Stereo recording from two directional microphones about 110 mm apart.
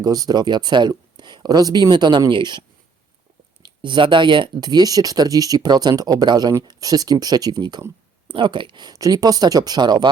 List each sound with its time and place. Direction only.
0.0 s speech: 35° right (ahead or behind)